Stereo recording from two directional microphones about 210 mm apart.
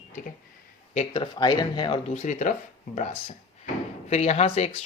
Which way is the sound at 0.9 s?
25° left (ahead or behind).